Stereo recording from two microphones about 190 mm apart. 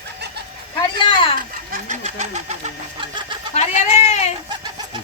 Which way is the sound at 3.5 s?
35° left (ahead or behind).